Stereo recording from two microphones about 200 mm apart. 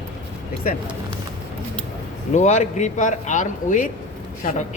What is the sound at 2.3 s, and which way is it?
Speech, 35° left (ahead or behind).